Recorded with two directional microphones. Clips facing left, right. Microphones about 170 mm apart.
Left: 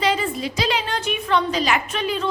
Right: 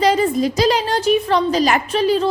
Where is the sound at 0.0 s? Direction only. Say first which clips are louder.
Right 7 dB; 40° right (ahead or behind).